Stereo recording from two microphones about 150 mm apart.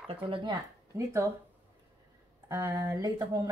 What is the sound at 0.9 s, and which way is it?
Speech, 20° right (ahead or behind).